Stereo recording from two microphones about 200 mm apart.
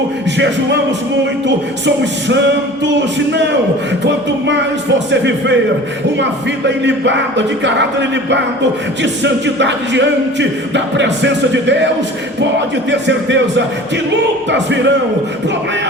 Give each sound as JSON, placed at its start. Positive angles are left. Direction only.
{"t": 2.8, "sound": "music", "side_deg": -60}
{"t": 6.7, "sound": "music", "side_deg": -60}
{"t": 14.5, "sound": "music", "side_deg": -60}